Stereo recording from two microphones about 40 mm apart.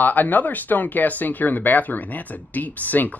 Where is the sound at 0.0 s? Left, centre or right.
Left.